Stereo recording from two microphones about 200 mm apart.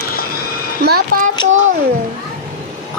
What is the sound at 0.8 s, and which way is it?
Speech, 50° right (ahead or behind).